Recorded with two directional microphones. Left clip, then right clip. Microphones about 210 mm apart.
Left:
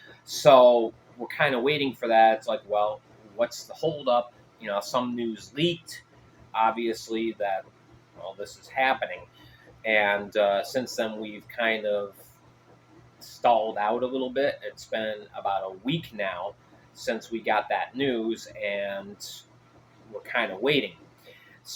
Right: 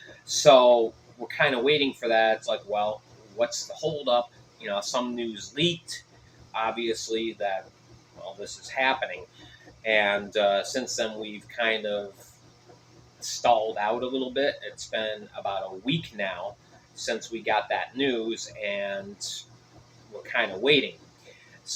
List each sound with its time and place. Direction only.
0.3 s speech: 20° left (ahead or behind)
8.7 s speech: 20° left (ahead or behind)
13.4 s speech: 15° left (ahead or behind)
20.2 s speech: 15° left (ahead or behind)